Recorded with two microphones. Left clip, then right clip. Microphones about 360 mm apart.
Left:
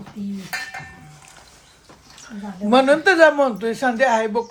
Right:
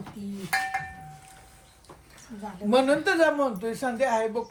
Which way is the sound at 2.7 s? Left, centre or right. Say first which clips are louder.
Left 8 dB; centre.